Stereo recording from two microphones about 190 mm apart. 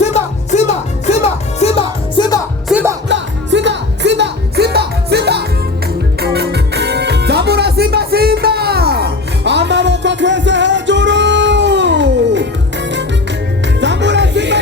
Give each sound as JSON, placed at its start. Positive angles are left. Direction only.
{"t": 0.0, "sound": "music", "side_deg": 35}
{"t": 2.6, "sound": "music", "side_deg": -5}
{"t": 3.1, "sound": "music", "side_deg": -70}
{"t": 13.8, "sound": "music", "side_deg": -65}